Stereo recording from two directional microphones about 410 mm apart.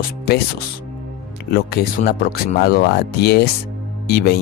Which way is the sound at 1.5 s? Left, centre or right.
Left.